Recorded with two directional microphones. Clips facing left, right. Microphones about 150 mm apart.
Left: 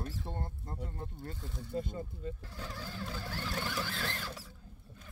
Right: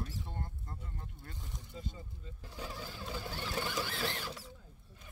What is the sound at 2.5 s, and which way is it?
Sewing machine, 10° right (ahead or behind).